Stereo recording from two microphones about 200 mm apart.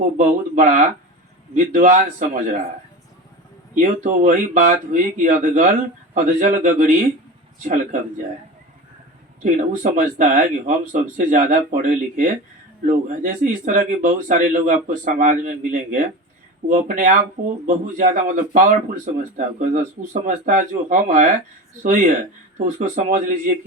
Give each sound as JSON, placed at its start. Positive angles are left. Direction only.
{"t": 0.2, "sound": "speech", "side_deg": -40}
{"t": 3.8, "sound": "speech", "side_deg": -40}
{"t": 9.4, "sound": "speech", "side_deg": -40}